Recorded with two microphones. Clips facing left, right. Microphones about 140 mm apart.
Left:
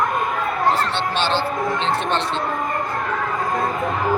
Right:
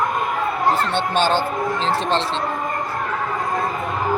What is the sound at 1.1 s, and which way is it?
Speech, 45° right (ahead or behind).